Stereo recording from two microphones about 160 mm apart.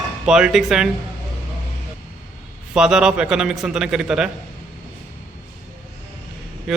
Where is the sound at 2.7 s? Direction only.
5° right (ahead or behind).